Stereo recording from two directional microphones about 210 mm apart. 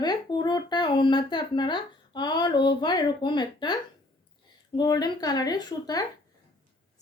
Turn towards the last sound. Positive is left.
turn(degrees=20)  # may be behind; listen again after turning